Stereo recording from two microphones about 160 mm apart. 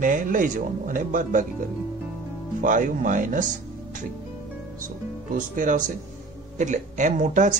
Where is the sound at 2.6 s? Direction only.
55° right (ahead or behind).